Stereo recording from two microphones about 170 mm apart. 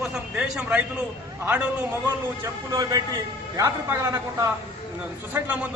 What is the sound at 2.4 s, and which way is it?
A man's voice, 20° right (ahead or behind).